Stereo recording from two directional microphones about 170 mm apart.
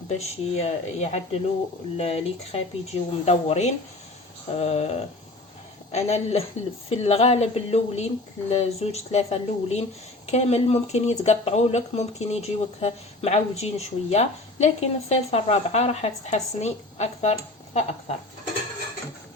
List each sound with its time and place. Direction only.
0.1 s speech: 40° left (ahead or behind)